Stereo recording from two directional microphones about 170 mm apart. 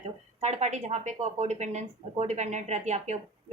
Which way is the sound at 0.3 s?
40° right (ahead or behind).